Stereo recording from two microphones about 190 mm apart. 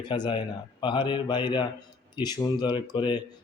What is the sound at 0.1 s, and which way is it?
Speech, 25° left (ahead or behind).